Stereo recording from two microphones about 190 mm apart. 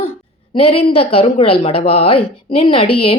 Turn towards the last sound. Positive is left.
turn(degrees=30)  # may be behind; listen again after turning